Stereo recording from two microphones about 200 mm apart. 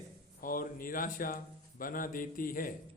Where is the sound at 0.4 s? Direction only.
45° left (ahead or behind).